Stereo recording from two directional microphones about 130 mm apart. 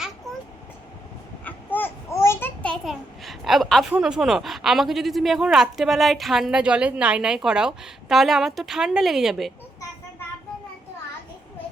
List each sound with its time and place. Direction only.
1.5 s babbling: 15° left (ahead or behind)
2.8 s a sound: centre (ahead or behind)
3.9 s speech: 5° right (ahead or behind)